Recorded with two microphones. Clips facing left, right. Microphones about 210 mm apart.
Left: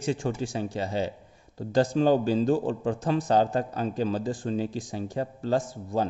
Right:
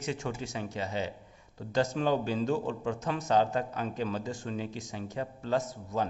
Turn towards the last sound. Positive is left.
turn(degrees=30)  # may be behind; listen again after turning